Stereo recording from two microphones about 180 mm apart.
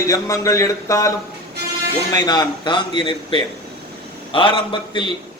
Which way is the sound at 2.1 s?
20° left (ahead or behind).